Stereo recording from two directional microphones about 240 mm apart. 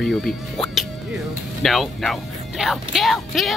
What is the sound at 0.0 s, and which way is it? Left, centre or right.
Speech, centre.